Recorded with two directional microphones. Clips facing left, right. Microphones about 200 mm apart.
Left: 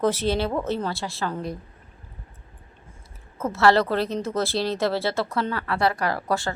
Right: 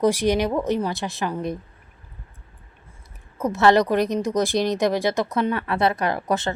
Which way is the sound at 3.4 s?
15° right (ahead or behind).